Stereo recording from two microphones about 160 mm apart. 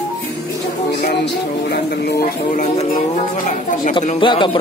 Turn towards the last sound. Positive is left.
turn(degrees=30)  # may be behind; listen again after turning